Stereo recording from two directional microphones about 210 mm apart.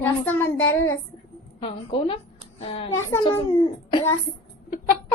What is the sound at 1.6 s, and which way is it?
A woman's voice, 25° left (ahead or behind).